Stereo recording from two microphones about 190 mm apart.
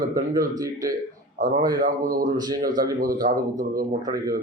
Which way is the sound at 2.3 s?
20° right (ahead or behind).